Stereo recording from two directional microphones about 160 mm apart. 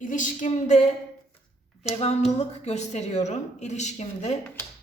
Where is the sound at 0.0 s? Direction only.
55° left (ahead or behind).